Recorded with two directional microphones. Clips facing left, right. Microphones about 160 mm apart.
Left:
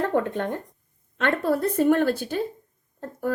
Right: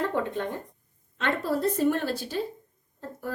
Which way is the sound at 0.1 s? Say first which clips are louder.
Left 4 dB; 50° left (ahead or behind).